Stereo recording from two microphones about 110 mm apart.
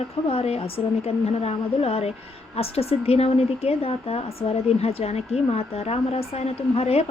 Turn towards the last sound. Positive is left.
turn(degrees=65)  # may be behind; listen again after turning